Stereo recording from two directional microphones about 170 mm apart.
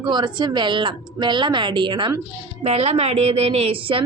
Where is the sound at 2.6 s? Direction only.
40° right (ahead or behind).